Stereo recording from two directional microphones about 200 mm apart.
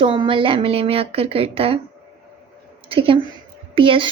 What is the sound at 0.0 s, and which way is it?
Speech, 25° right (ahead or behind).